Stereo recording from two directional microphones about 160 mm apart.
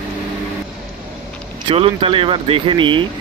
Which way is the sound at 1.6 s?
35° right (ahead or behind).